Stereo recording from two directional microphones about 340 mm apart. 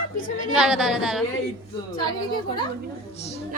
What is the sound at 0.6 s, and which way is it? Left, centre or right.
Speech, centre.